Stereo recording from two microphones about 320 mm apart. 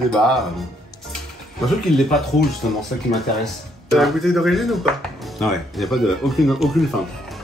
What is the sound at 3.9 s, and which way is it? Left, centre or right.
Speech, centre.